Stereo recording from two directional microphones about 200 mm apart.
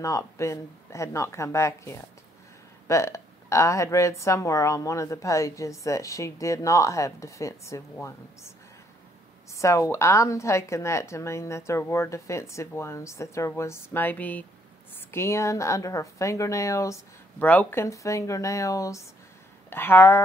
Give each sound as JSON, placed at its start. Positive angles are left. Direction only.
{"t": 0.0, "sound": "speech", "side_deg": 15}